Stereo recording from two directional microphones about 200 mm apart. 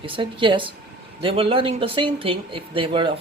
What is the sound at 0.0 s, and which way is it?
Speech, 25° right (ahead or behind).